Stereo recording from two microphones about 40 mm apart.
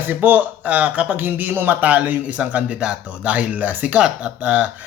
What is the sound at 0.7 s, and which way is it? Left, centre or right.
Speech, right.